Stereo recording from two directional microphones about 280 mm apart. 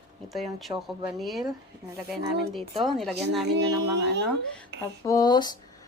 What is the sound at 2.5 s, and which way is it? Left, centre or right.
Speech, centre.